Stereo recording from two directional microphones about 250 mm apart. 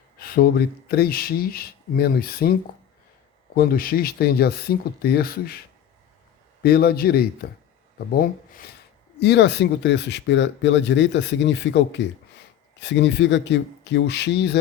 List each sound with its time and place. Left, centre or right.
0.2 s speech: left
6.6 s speech: left